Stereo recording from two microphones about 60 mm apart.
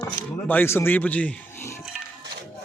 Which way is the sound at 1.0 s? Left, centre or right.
Left.